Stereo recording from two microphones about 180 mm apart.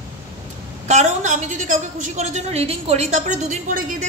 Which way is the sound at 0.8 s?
40° right (ahead or behind).